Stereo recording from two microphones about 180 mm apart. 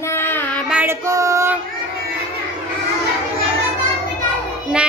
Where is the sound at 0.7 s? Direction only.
10° right (ahead or behind).